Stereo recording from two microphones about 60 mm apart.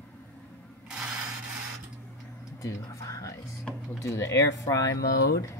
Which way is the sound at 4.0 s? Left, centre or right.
Left.